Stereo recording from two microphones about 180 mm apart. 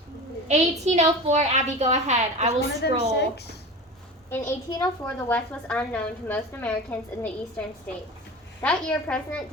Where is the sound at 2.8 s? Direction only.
65° left (ahead or behind).